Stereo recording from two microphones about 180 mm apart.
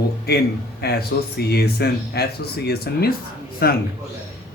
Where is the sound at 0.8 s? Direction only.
60° left (ahead or behind).